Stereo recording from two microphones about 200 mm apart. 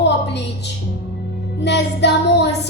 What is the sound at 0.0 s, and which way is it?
Music, 60° left (ahead or behind).